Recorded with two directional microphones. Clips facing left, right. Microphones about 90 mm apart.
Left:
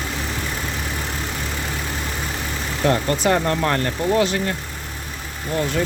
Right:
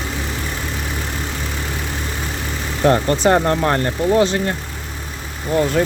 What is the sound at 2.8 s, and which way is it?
Speech, 30° right (ahead or behind).